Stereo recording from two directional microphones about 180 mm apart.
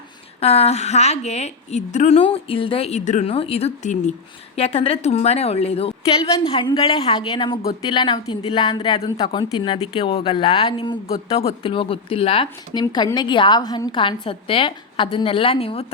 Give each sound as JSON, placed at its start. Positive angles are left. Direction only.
{"t": 0.3, "sound": "a woman's voice", "side_deg": 35}
{"t": 6.4, "sound": "a woman's voice", "side_deg": 20}